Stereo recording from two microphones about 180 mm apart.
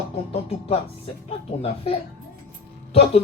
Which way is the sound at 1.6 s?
30° left (ahead or behind).